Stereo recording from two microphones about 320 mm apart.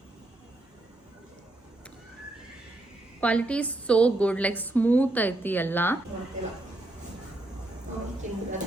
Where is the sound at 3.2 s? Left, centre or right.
Centre.